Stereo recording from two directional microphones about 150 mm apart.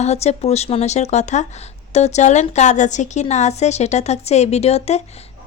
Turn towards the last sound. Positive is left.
turn(degrees=45)  # may be behind; listen again after turning